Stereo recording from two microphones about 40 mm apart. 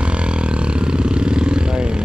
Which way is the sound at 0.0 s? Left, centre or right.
Right.